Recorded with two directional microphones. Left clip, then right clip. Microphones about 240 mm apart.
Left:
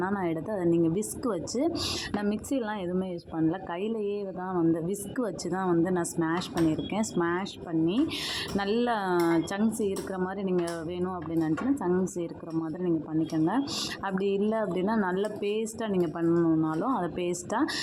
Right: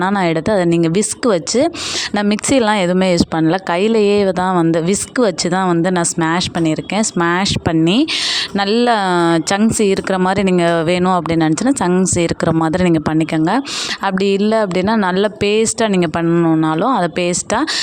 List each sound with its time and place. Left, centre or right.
0.0 s speech: right